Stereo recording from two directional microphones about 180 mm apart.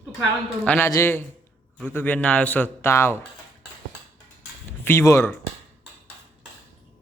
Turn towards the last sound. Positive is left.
turn(degrees=15)  # may be behind; listen again after turning